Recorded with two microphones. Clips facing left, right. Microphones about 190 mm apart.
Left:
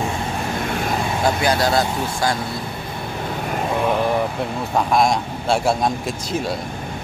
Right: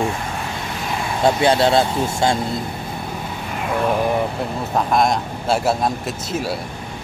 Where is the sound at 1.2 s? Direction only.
25° right (ahead or behind).